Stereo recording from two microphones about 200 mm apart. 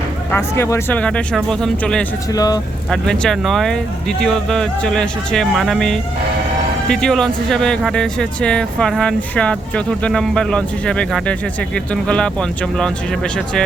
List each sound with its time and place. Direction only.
0.3 s speech: 15° left (ahead or behind)
2.3 s speech: 20° left (ahead or behind)
2.9 s speech: centre (ahead or behind)